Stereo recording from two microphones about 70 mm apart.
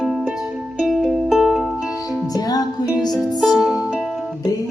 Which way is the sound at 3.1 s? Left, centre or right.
Centre.